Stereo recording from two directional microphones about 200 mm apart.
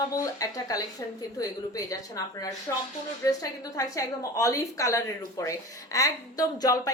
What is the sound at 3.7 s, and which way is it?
Speech, 15° left (ahead or behind).